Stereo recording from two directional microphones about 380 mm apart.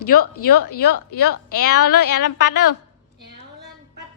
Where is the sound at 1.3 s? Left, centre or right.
Left.